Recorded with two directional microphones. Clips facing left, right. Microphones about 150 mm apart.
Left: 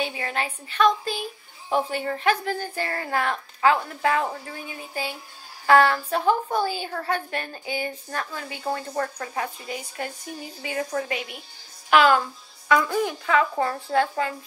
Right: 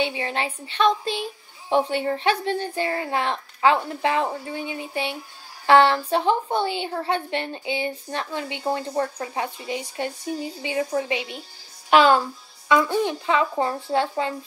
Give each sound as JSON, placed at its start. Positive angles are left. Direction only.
{"t": 0.0, "sound": "a woman's voice", "side_deg": -25}